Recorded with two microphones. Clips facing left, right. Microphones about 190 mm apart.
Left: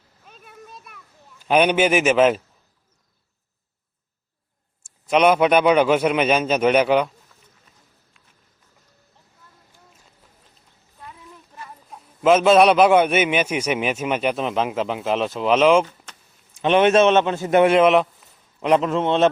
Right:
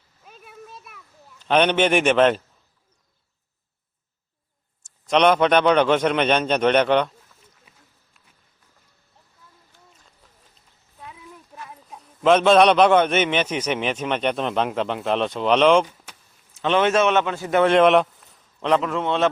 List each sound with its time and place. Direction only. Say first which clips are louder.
0.3 s children playing: right 1 dB; 5° right (ahead or behind)
1.4 s a man's voice: left 1 dB; 10° left (ahead or behind)
5.0 s a man's voice: left 1 dB; 5° left (ahead or behind)
7.7 s run: even; 5° right (ahead or behind)
11.0 s a sound: right 1 dB; 5° right (ahead or behind)
11.9 s a man's voice: left 1 dB; 5° left (ahead or behind)
16.1 s keys jangling: even; 10° right (ahead or behind)
16.6 s a man's voice: left 4 dB; 15° left (ahead or behind)
17.7 s speech: even; centre (ahead or behind)
18.8 s a man's voice: left 3 dB; 25° left (ahead or behind)